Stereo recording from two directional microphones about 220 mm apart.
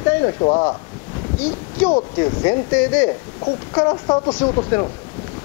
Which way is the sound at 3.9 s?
25° left (ahead or behind).